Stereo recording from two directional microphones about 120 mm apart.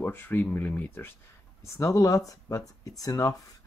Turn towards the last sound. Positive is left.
turn(degrees=30)  # may be behind; listen again after turning